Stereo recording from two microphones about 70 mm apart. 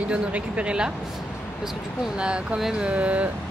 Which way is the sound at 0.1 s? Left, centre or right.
Centre.